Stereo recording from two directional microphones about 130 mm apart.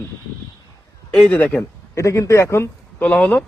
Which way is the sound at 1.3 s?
15° left (ahead or behind).